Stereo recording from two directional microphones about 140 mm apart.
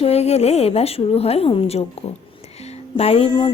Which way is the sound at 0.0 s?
50° left (ahead or behind).